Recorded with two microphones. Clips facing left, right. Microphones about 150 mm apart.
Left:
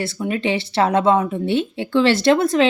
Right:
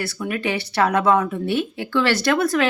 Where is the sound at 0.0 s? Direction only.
25° left (ahead or behind).